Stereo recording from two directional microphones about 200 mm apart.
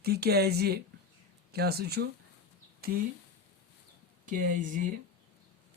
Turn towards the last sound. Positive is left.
turn(degrees=-40)  # may be behind; listen again after turning